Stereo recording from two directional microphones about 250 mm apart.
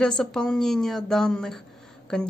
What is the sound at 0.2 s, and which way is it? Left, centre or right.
A woman's voice, centre.